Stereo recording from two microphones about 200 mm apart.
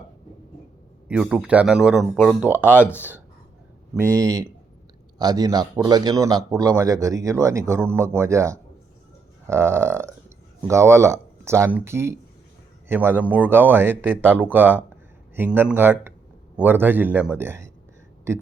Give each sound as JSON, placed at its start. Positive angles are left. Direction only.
{"t": 1.0, "sound": "speech", "side_deg": -5}
{"t": 4.0, "sound": "a man's voice", "side_deg": -15}